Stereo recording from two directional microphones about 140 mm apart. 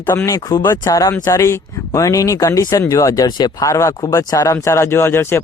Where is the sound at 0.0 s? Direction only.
10° left (ahead or behind).